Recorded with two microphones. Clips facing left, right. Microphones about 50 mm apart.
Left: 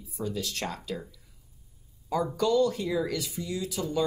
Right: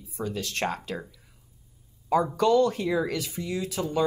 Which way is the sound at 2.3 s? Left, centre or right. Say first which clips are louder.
Right 1 dB; right.